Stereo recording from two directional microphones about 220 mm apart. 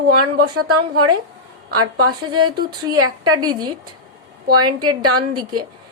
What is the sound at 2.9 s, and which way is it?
Speech, 80° right.